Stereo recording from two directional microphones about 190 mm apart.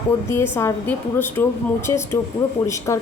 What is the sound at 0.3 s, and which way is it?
Speech, 10° left (ahead or behind).